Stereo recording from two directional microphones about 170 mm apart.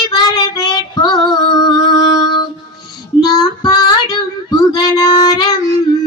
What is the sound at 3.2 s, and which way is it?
Child singing, 25° left (ahead or behind).